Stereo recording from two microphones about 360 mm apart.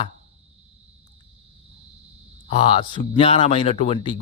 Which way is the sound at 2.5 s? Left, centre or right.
Centre.